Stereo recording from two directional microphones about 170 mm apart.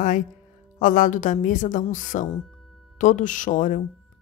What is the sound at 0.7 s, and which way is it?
Speech, 50° left (ahead or behind).